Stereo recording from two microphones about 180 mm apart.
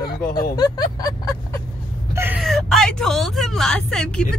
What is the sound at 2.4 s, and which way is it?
Speech, centre (ahead or behind).